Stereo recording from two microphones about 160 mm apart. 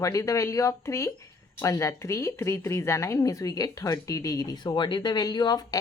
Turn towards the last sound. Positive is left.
turn(degrees=25)  # may be behind; listen again after turning